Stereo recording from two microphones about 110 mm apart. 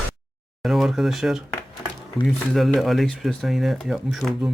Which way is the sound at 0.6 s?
Centre (ahead or behind).